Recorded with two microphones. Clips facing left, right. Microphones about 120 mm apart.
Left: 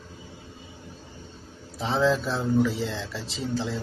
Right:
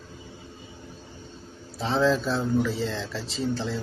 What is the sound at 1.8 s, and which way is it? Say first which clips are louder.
Speech: even; 15° left (ahead or behind).